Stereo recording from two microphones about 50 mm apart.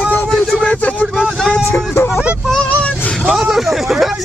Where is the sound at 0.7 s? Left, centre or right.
Left.